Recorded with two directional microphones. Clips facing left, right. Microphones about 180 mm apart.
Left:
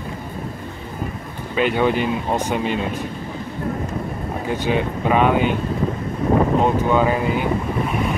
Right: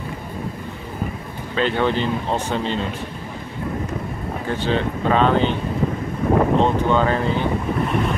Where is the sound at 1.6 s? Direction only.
10° left (ahead or behind).